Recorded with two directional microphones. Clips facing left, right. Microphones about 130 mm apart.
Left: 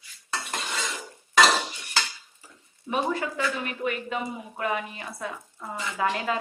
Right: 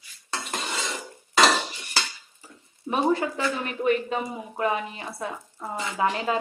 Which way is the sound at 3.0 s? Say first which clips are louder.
Right 4 dB; 30° right (ahead or behind).